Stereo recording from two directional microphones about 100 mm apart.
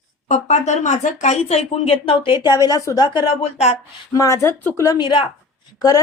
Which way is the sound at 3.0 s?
50° left (ahead or behind).